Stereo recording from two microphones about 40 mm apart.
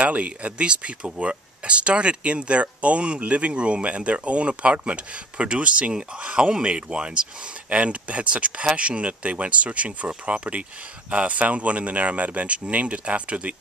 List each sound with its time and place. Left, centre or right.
0.0 s speech: right